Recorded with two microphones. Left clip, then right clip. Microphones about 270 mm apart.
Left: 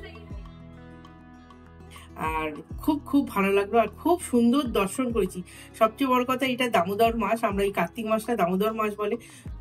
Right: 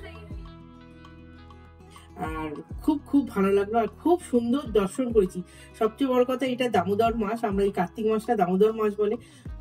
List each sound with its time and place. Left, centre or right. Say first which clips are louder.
2.1 s speech: left 4 dB; left